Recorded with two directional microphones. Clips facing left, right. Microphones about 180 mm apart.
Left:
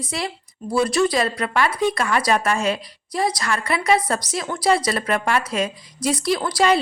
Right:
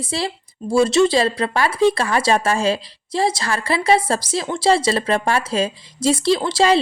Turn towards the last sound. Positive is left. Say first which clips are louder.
# right 3 dB
turn(degrees=-25)  # may be behind; listen again after turning